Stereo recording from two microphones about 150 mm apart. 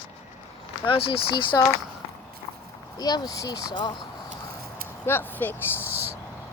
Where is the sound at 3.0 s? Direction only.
25° left (ahead or behind).